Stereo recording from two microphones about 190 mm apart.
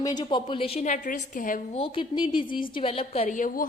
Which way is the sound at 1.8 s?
25° left (ahead or behind).